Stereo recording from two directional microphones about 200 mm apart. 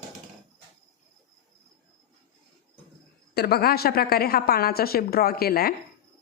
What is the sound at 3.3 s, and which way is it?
A woman's voice, 50° left (ahead or behind).